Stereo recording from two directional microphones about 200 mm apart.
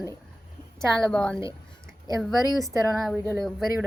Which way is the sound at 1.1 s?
5° left (ahead or behind).